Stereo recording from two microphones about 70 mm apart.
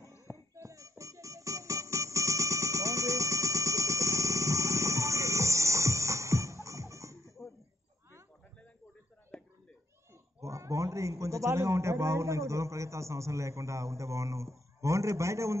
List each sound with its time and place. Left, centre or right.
0.3 s music: right
9.3 s a sound: centre
10.4 s a man's voice: right